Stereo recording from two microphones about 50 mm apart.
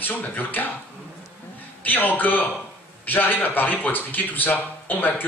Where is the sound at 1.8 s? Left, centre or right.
Left.